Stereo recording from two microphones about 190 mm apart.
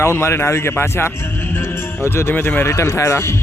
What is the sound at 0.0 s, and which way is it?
Speech, 15° left (ahead or behind).